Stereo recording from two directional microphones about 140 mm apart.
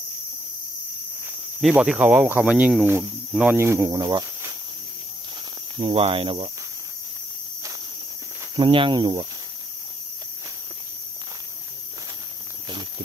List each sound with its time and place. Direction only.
1.6 s speech: 5° right (ahead or behind); by 4.6 s 25° right (ahead or behind)
5.8 s speech: 40° right (ahead or behind)
8.5 s speech: 35° right (ahead or behind)